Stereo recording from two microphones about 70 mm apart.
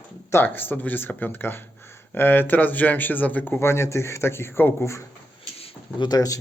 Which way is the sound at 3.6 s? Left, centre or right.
Left.